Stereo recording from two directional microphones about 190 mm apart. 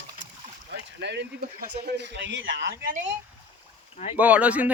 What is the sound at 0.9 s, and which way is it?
A man's voice, 65° right (ahead or behind).